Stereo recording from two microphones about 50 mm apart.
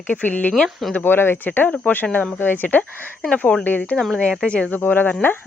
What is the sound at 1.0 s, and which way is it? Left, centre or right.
Speech, left.